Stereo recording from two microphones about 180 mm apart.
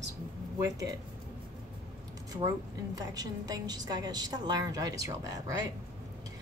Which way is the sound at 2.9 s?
20° right (ahead or behind).